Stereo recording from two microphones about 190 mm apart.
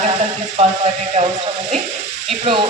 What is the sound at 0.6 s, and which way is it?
Speech, 35° right (ahead or behind).